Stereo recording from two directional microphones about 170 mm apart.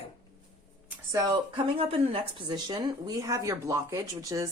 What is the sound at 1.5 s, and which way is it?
Speech, 30° right (ahead or behind).